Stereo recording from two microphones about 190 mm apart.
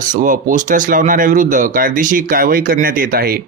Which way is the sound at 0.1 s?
45° right (ahead or behind).